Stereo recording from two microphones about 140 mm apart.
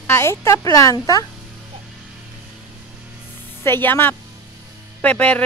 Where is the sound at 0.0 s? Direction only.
20° left (ahead or behind).